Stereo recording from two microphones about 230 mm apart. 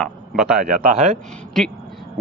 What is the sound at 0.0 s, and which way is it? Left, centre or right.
Speech, centre.